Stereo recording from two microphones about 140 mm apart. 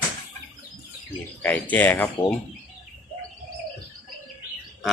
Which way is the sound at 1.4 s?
10° left (ahead or behind).